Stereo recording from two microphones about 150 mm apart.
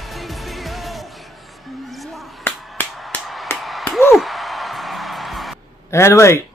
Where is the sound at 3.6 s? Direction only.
Centre (ahead or behind).